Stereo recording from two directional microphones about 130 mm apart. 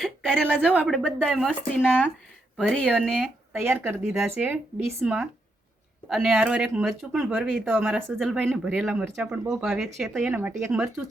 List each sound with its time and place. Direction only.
0.0 s a sound: 5° left (ahead or behind)
0.9 s speech: 5° left (ahead or behind)
3.2 s speech: 15° right (ahead or behind)
6.1 s speech: centre (ahead or behind)